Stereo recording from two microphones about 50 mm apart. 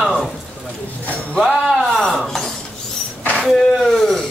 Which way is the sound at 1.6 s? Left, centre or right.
Centre.